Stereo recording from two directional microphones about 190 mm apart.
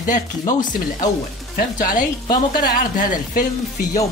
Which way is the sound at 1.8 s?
45° left (ahead or behind).